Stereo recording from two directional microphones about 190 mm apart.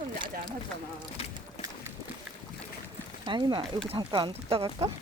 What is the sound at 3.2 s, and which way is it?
Speech, 25° right (ahead or behind).